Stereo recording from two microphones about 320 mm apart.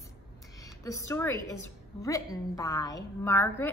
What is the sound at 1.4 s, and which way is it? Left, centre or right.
Speech, left.